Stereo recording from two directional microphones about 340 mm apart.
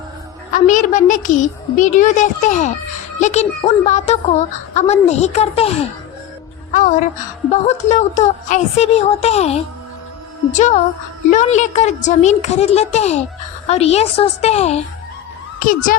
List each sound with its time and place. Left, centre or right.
0.5 s a woman's voice: left